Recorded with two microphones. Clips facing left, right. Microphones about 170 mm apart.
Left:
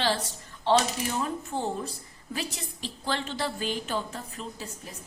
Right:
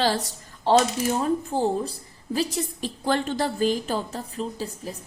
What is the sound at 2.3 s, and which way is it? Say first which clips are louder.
A woman's voice: right 9 dB; 45° right (ahead or behind).